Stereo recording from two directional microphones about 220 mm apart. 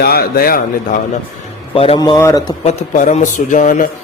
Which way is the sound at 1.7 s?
25° left (ahead or behind).